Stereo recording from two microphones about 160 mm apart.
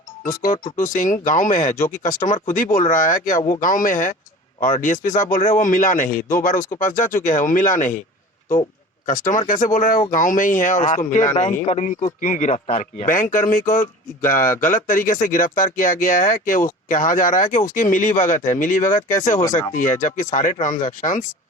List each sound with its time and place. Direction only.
0.3 s speech: 55° left (ahead or behind)
9.0 s speech: 55° left (ahead or behind)
12.2 s speech: 55° left (ahead or behind)